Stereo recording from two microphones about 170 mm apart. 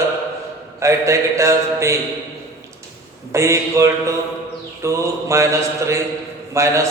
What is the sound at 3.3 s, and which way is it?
Mantra, 15° right (ahead or behind).